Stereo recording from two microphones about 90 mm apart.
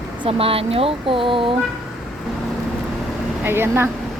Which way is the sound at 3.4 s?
25° right (ahead or behind).